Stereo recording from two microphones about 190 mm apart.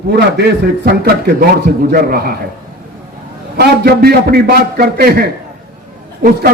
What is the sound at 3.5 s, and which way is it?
A man's voice, 55° right (ahead or behind).